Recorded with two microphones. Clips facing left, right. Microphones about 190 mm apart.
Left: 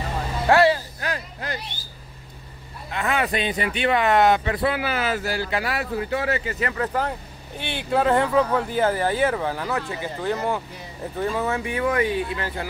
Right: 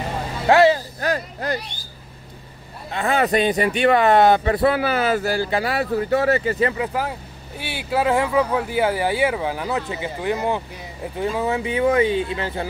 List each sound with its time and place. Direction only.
0.5 s speech: 20° right (ahead or behind)
1.0 s speech: 40° right (ahead or behind)
2.9 s speech: 30° right (ahead or behind)
6.7 s speech: 10° right (ahead or behind)